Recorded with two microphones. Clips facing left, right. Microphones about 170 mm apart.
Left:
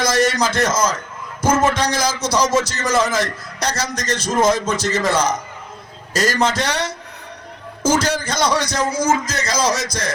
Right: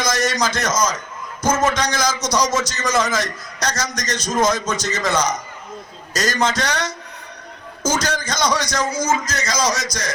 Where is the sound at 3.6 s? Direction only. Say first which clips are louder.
Left 1 dB; 30° left (ahead or behind).